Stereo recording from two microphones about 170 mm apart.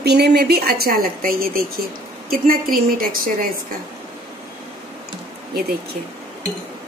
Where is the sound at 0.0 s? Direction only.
75° right (ahead or behind); by 3.4 s 55° right (ahead or behind).